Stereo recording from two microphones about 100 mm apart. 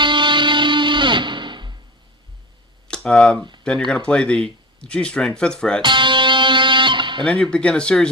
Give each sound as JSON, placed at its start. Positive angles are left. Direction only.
{"t": 0.0, "sound": "music", "side_deg": -50}
{"t": 2.8, "sound": "speech", "side_deg": 10}
{"t": 5.8, "sound": "music", "side_deg": -50}
{"t": 7.3, "sound": "speech", "side_deg": 10}